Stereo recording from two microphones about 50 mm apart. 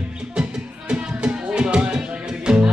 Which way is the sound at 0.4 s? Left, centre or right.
Centre.